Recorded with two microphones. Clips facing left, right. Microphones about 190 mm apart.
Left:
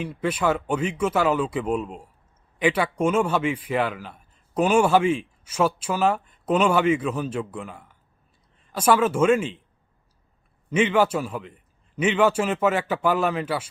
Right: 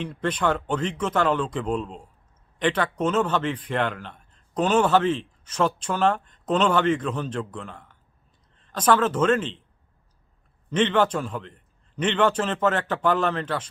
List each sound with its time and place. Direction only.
0.0 s speech: 10° left (ahead or behind)
10.7 s speech: 10° left (ahead or behind)